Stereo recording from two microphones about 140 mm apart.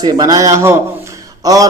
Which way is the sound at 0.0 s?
25° right (ahead or behind).